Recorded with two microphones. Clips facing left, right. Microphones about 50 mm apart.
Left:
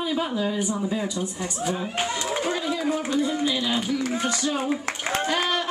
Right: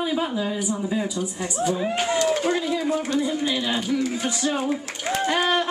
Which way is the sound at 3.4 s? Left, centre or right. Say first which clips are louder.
Even; centre.